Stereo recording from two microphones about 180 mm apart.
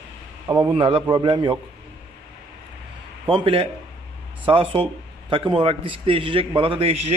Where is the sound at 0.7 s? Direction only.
30° right (ahead or behind).